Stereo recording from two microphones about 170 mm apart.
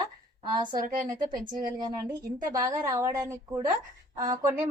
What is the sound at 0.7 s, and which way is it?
Speech, 55° right (ahead or behind).